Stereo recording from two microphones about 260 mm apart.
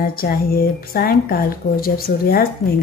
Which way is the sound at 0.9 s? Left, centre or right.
Left.